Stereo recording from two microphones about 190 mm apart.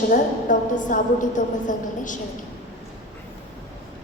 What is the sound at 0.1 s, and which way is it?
A woman's voice, 40° left (ahead or behind).